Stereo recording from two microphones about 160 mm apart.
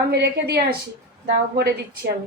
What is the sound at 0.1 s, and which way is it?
Speech, 90° right.